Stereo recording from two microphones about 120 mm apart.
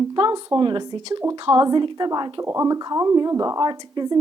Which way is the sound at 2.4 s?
25° right (ahead or behind).